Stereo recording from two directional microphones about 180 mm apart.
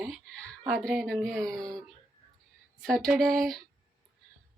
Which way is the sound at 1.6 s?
20° right (ahead or behind).